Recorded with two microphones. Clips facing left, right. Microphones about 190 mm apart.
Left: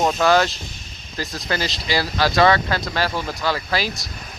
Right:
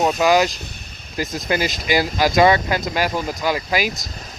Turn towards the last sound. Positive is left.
turn(degrees=-15)  # may be behind; listen again after turning